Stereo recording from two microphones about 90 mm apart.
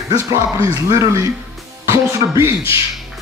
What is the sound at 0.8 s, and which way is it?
A man's voice, 35° right (ahead or behind).